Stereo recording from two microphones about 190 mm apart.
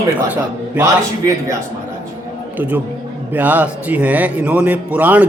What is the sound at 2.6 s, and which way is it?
A man's voice, 10° right (ahead or behind).